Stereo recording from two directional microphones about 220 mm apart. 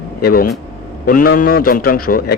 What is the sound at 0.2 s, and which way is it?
A man's voice, 45° left (ahead or behind).